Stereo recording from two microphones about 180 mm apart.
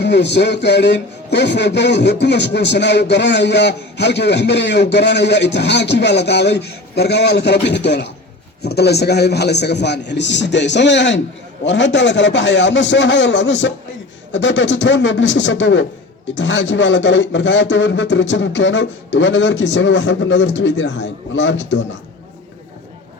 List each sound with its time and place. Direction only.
0.0 s a man's voice: 75° left (ahead or behind); by 21.8 s 90° left